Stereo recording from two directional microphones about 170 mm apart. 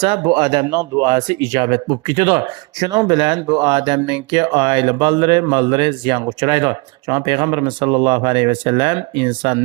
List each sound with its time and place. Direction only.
0.0 s speech: 25° right (ahead or behind)